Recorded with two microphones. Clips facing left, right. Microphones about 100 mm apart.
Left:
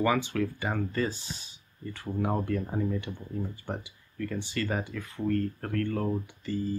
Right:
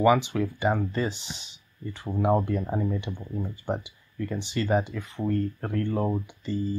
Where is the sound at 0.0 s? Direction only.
20° right (ahead or behind).